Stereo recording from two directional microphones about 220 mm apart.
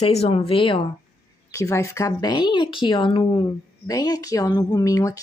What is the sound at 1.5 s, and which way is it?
Speech, 15° left (ahead or behind).